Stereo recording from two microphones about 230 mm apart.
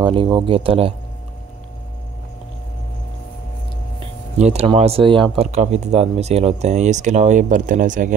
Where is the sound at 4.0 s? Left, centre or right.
Right.